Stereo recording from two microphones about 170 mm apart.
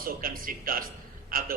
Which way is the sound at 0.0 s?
60° right (ahead or behind).